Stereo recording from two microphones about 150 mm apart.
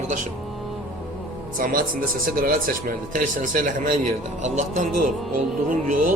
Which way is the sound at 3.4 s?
60° right (ahead or behind).